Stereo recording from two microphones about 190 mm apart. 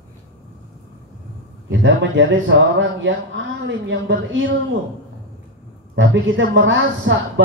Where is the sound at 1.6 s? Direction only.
80° right.